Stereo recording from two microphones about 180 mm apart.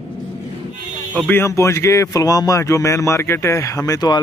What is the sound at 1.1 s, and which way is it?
Speech, 10° left (ahead or behind).